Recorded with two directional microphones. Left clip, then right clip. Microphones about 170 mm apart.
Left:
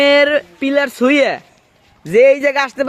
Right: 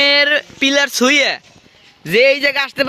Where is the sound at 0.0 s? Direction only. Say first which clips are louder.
Left 1 dB; 5° right (ahead or behind).